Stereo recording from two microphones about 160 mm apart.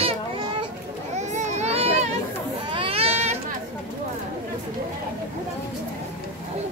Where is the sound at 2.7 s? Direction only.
35° right (ahead or behind).